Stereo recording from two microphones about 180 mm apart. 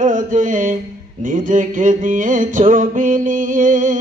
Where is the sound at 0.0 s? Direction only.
45° right (ahead or behind).